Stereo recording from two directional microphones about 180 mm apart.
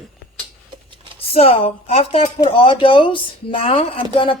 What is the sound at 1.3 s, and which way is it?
Speech, 30° left (ahead or behind).